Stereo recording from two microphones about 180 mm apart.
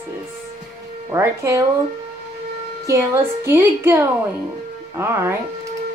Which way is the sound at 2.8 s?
15° right (ahead or behind).